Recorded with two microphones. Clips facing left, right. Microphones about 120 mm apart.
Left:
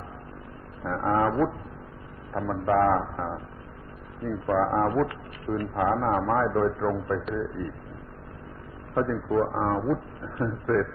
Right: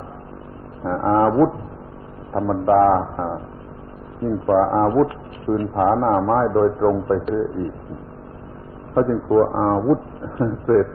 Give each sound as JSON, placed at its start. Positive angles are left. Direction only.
{"t": 0.9, "sound": "a man's voice", "side_deg": -40}
{"t": 9.0, "sound": "a man's voice", "side_deg": -45}